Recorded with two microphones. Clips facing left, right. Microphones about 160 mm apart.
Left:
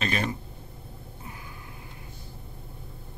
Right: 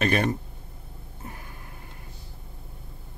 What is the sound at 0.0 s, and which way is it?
Speech, 55° right (ahead or behind).